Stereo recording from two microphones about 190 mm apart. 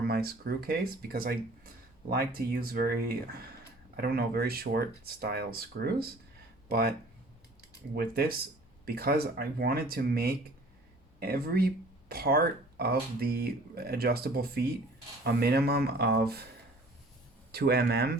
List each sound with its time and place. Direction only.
0.0 s speech: 55° right (ahead or behind)
7.9 s speech: 50° right (ahead or behind)
17.5 s speech: 55° right (ahead or behind)